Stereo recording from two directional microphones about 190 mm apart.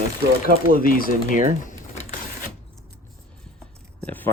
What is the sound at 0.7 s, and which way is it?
Speech, 50° left (ahead or behind).